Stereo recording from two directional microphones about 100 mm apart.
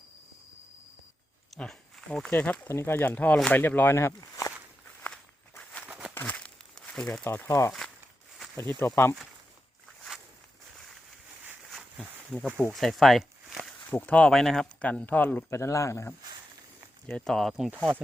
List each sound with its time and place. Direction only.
1.5 s speech: 5° left (ahead or behind)
2.3 s speech: 20° left (ahead or behind)
4.2 s walk: 35° left (ahead or behind)
5.0 s walk: 10° left (ahead or behind)
5.8 s a sound: 10° right (ahead or behind)
6.1 s crumpling: 15° left (ahead or behind)
7.3 s speech: 25° left (ahead or behind)
11.7 s a sound: 5° left (ahead or behind)
12.7 s speech: centre (ahead or behind)
13.9 s speech: 15° left (ahead or behind)
15.5 s speech: 30° left (ahead or behind)
17.1 s speech: 5° left (ahead or behind)